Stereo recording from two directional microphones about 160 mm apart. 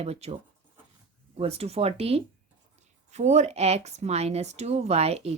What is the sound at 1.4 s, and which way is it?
A woman's voice, 40° right (ahead or behind).